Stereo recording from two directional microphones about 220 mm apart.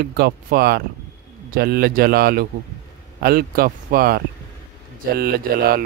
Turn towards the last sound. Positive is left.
turn(degrees=-40)  # may be behind; listen again after turning